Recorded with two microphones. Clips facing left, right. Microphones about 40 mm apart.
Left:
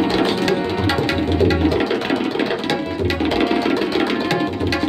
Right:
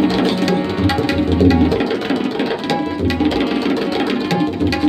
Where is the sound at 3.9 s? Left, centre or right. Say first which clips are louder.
Right 1 dB; left.